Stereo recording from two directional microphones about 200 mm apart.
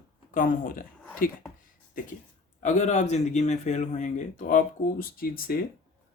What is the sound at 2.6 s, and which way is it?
Speech, 40° left (ahead or behind).